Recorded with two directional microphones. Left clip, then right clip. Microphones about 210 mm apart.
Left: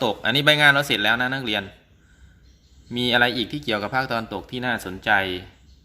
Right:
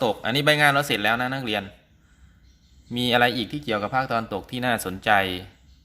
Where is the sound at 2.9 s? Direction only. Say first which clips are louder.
Left 1 dB; 15° right (ahead or behind).